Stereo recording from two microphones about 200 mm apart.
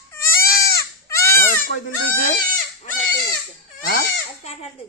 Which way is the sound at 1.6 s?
45° left (ahead or behind).